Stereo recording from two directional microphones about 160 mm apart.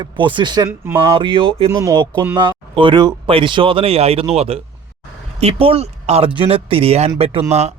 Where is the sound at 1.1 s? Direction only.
35° right (ahead or behind).